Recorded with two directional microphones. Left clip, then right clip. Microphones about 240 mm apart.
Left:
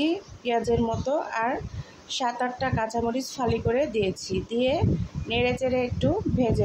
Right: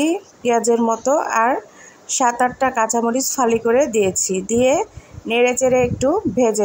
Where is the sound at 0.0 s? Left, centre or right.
Centre.